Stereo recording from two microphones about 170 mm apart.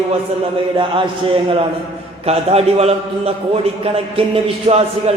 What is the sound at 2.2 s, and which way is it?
A man's voice, 35° right (ahead or behind).